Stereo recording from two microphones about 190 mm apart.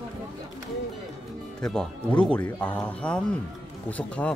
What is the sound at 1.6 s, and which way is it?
Speech, 5° left (ahead or behind).